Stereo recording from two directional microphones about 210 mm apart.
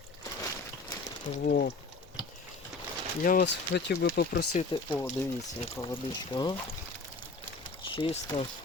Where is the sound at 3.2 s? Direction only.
40° left (ahead or behind).